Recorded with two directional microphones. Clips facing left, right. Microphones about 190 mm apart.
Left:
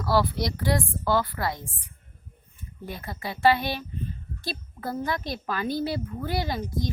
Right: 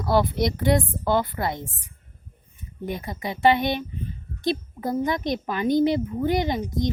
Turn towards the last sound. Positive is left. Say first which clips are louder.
# right 5 dB
turn(degrees=-20)  # may be behind; listen again after turning